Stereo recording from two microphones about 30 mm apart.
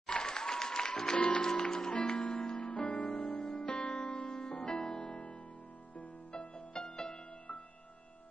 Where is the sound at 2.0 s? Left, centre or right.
Left.